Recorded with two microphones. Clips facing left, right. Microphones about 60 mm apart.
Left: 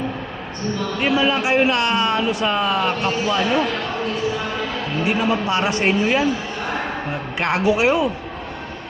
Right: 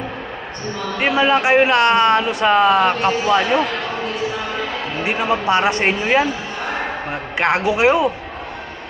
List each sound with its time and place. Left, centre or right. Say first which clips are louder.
0.9 s a man's voice: right 4 dB; right
2.2 s a man's voice: right 5 dB; right
5.0 s a man's voice: right 2 dB; right
7.3 s a man's voice: right 1 dB; right